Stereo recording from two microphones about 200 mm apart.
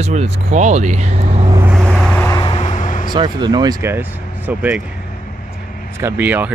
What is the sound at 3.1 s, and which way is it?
Speech, 20° right (ahead or behind).